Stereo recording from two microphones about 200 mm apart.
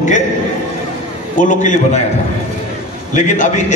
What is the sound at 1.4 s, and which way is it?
Speech, 40° left (ahead or behind).